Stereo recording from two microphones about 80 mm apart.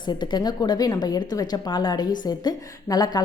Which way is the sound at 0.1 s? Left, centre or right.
Left.